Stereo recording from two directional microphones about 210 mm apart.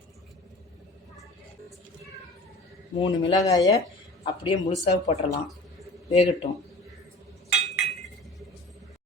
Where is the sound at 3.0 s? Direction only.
15° left (ahead or behind).